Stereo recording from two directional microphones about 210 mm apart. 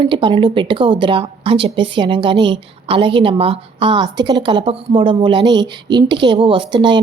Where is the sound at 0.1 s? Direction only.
25° right (ahead or behind).